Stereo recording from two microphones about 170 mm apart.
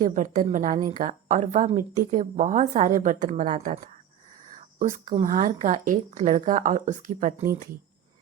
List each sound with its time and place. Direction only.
0.0 s a woman's voice: 50° right (ahead or behind)
4.8 s a woman's voice: 45° right (ahead or behind)